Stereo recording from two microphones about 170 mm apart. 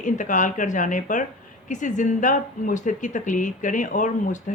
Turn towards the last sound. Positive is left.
turn(degrees=50)  # may be behind; listen again after turning